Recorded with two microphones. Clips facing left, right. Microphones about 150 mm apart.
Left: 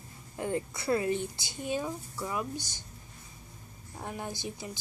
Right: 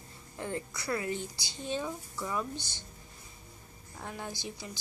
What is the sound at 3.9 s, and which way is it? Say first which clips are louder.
Speech: left 2 dB; 15° left (ahead or behind).